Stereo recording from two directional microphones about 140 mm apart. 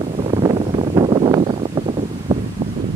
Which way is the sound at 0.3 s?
40° right (ahead or behind).